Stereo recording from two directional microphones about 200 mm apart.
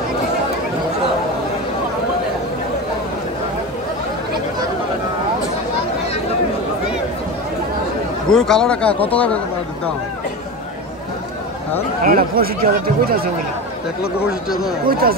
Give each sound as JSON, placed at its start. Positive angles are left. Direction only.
{"t": 8.3, "sound": "a man's voice", "side_deg": 5}
{"t": 12.0, "sound": "speech", "side_deg": -45}
{"t": 14.9, "sound": "speech", "side_deg": -50}